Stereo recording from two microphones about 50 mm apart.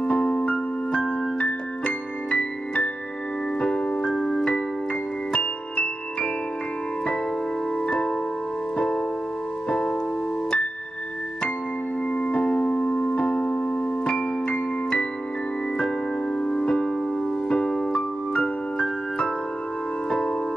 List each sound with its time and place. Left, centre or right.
0.0 s keyboard: left
1.9 s music: left
3.6 s keyboard: centre
4.1 s keyboard: centre
5.3 s music: left
8.7 s music: centre
12.1 s keyboard: left
16.3 s music: centre
17.5 s keyboard: centre
18.4 s music: left